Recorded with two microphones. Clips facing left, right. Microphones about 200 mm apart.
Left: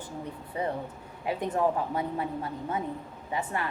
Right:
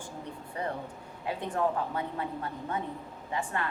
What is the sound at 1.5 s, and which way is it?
A woman's voice, 20° left (ahead or behind).